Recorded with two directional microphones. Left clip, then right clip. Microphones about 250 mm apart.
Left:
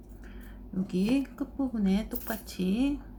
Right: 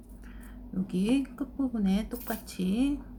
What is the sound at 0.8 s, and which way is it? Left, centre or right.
Speech, centre.